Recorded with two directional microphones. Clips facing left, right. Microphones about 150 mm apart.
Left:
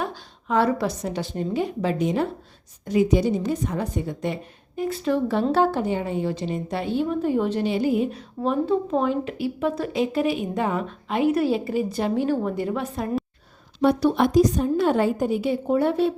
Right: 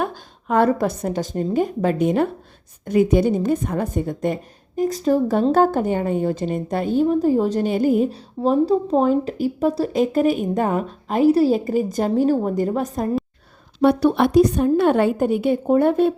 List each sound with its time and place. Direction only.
0.0 s a woman's voice: 50° right (ahead or behind)
13.8 s a woman's voice: 60° right (ahead or behind)